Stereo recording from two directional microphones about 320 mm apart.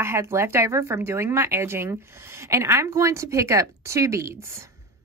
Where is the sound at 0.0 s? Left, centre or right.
Centre.